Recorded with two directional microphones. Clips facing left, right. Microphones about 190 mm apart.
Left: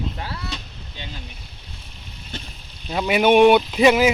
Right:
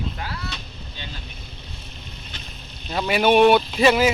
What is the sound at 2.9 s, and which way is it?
Speech, 10° left (ahead or behind).